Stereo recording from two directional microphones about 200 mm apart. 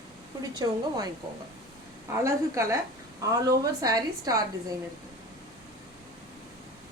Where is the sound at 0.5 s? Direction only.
20° right (ahead or behind).